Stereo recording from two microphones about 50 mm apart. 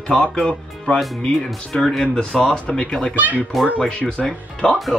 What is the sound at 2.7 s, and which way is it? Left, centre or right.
Speech, left.